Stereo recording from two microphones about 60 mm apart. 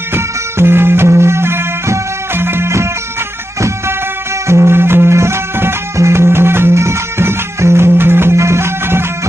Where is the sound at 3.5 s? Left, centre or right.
Right.